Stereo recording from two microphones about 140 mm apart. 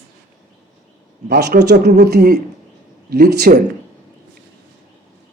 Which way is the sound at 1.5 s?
90° right.